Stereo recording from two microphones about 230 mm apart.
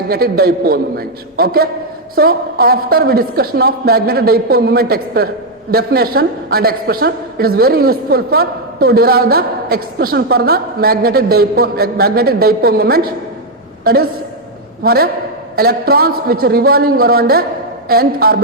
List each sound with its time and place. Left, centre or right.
0.1 s a woman's voice: right